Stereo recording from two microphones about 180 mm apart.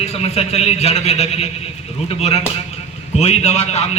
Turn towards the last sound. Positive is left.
turn(degrees=35)  # may be behind; listen again after turning